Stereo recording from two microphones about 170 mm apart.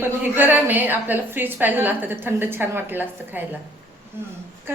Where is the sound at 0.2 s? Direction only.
10° right (ahead or behind).